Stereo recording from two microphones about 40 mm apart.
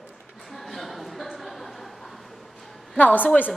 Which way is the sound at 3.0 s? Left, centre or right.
Left.